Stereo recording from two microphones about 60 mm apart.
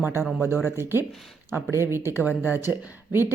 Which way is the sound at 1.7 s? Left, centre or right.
Right.